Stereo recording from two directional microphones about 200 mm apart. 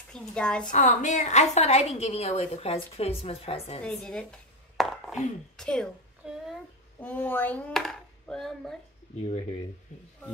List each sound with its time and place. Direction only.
0.1 s a woman's voice: 5° left (ahead or behind)
0.7 s a woman's voice: 40° left (ahead or behind)
3.8 s dishes: 5° left (ahead or behind)
5.6 s a sound: 5° left (ahead or behind)
7.0 s speech: 10° left (ahead or behind)
9.2 s speech: 30° left (ahead or behind)